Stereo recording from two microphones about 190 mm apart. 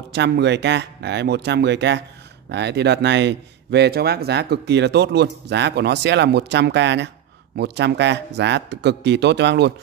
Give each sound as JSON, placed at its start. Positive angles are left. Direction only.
{"t": 0.1, "sound": "speech", "side_deg": -65}